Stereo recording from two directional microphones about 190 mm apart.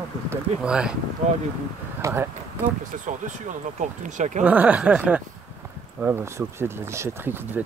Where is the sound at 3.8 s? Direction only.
40° right (ahead or behind).